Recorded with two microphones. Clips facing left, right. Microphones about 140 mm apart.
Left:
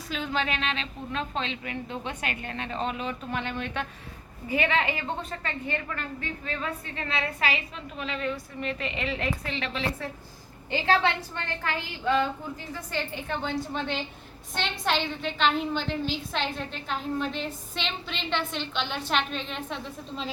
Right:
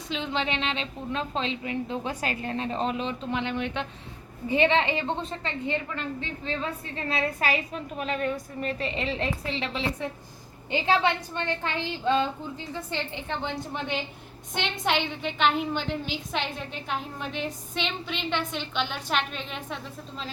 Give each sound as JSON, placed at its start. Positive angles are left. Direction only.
{"t": 0.1, "sound": "a woman's voice", "side_deg": -25}
{"t": 8.8, "sound": "a woman's voice", "side_deg": -30}